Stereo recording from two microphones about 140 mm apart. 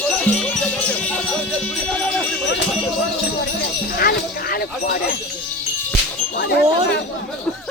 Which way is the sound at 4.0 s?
90° left.